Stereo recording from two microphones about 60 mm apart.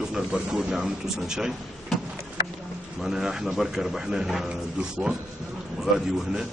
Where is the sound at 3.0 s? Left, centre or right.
Centre.